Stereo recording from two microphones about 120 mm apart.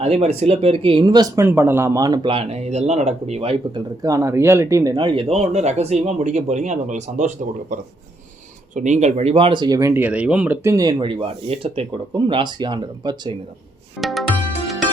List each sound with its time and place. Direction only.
0.0 s speech: 55° right (ahead or behind); by 1.3 s 35° right (ahead or behind)
1.4 s speech: 20° right (ahead or behind)
2.2 s speech: 55° right (ahead or behind)
4.0 s speech: 25° right (ahead or behind)
4.9 s speech: 40° right (ahead or behind)
5.3 s speech: 65° right (ahead or behind); by 7.3 s 85° right
8.7 s speech: 90° right; by 9.9 s 30° right (ahead or behind)
9.9 s speech: 10° right (ahead or behind)
10.6 s speech: 25° right (ahead or behind)
10.8 s speech: 40° right (ahead or behind)
14.0 s music: centre (ahead or behind)